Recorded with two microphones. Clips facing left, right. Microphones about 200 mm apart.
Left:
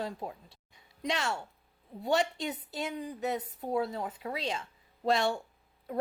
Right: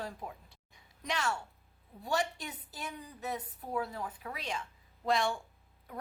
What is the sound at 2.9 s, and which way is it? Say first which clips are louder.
Speech: left 7 dB; 80° left.